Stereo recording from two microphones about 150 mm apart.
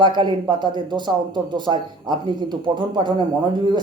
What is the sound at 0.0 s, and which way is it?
Speech, 30° right (ahead or behind).